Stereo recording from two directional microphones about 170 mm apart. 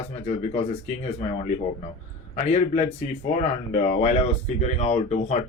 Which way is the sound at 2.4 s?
40° left (ahead or behind).